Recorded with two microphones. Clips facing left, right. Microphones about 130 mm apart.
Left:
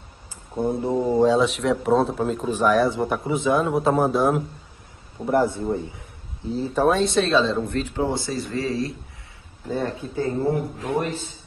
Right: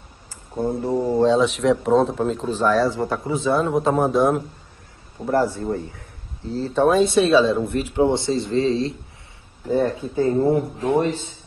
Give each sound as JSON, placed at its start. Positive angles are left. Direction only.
{"t": 0.7, "sound": "speech", "side_deg": 20}
{"t": 5.3, "sound": "a man's voice", "side_deg": 20}
{"t": 6.7, "sound": "speech", "side_deg": 0}